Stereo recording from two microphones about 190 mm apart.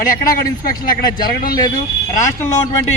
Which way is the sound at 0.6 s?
50° left (ahead or behind).